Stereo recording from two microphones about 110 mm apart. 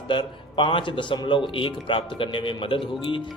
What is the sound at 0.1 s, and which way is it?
Speech, 50° left (ahead or behind).